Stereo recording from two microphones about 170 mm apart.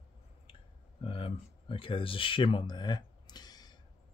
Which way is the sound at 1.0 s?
30° left (ahead or behind).